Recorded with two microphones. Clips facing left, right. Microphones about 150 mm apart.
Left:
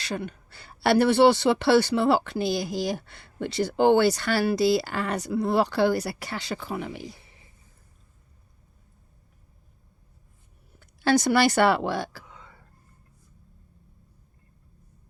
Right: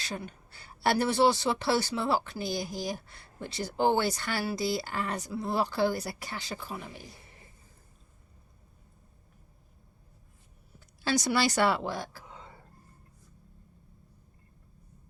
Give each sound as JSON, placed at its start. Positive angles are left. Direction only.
{"t": 0.0, "sound": "speech", "side_deg": 75}
{"t": 10.8, "sound": "speech", "side_deg": 60}
{"t": 12.3, "sound": "a sound", "side_deg": -30}